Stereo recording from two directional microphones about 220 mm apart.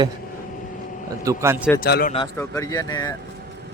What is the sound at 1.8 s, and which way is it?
Speech, 40° left (ahead or behind).